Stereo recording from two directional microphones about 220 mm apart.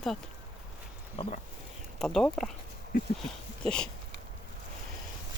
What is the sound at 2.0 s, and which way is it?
Speech, 5° left (ahead or behind).